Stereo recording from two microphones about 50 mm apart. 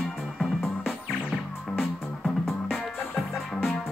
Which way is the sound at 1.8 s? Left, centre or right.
Centre.